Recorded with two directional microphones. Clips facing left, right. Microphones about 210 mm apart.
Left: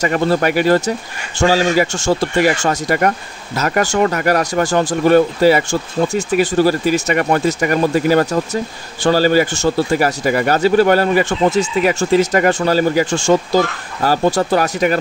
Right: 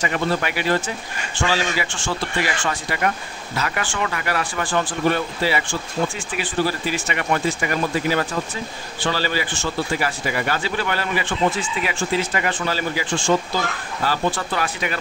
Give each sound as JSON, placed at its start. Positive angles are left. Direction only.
{"t": 0.0, "sound": "speech", "side_deg": 40}